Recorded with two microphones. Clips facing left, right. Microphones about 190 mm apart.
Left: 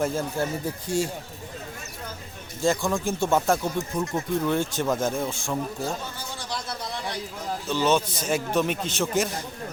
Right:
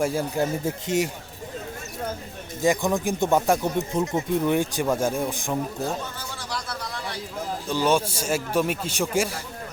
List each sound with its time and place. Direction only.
0.0 s a man's voice: 10° right (ahead or behind)
2.6 s a man's voice: 20° right (ahead or behind)
6.5 s a sound: 25° left (ahead or behind)
7.7 s a man's voice: 10° right (ahead or behind)